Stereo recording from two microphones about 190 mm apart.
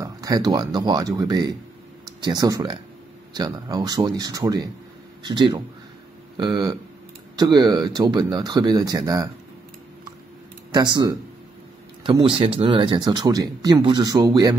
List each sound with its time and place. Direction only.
0.0 s speech: 20° right (ahead or behind)
10.7 s speech: 20° right (ahead or behind)